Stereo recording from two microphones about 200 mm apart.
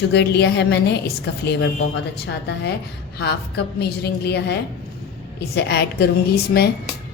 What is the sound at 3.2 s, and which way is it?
A woman's voice, 55° left (ahead or behind).